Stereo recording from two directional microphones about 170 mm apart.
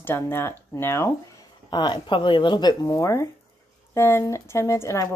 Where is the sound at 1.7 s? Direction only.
30° left (ahead or behind).